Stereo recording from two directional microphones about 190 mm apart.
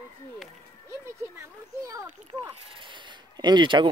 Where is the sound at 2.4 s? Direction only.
25° right (ahead or behind).